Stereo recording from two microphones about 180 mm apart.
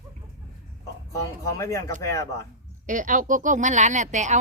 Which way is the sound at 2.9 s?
45° right (ahead or behind).